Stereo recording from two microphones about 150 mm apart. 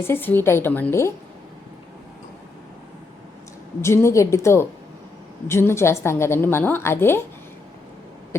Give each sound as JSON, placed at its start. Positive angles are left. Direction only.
{"t": 0.1, "sound": "a woman's voice", "side_deg": 15}
{"t": 3.8, "sound": "a woman's voice", "side_deg": 15}